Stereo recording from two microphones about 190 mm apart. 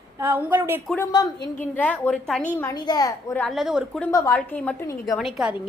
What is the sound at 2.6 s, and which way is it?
Speech, 20° left (ahead or behind).